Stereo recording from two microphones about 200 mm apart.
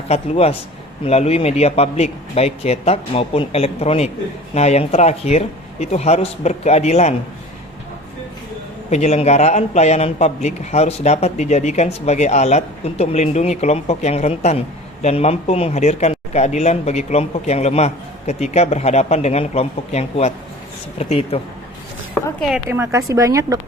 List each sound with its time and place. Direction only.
0.1 s speech: 30° left (ahead or behind)
8.9 s speech: 35° left (ahead or behind)
22.4 s a woman's voice: 5° right (ahead or behind)